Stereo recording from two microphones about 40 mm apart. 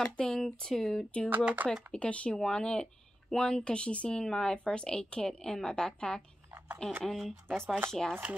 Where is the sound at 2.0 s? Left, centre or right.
Left.